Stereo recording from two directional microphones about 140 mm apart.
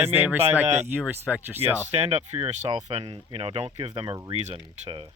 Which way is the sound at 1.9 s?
50° right (ahead or behind).